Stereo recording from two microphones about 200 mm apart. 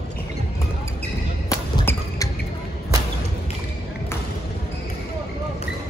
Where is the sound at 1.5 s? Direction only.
15° left (ahead or behind).